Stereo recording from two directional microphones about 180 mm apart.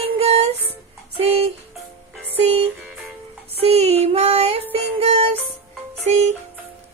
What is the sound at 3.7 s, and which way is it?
Female singing, 35° right (ahead or behind).